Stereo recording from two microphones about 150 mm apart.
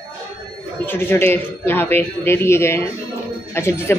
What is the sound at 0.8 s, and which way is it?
A woman's voice, 15° left (ahead or behind).